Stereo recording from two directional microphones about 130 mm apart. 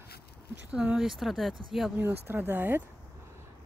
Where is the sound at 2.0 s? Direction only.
15° right (ahead or behind).